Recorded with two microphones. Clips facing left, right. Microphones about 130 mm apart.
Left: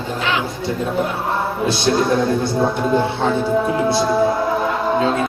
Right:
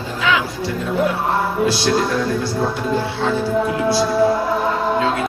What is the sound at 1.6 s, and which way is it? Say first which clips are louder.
Mantra: left 4 dB; 20° left (ahead or behind).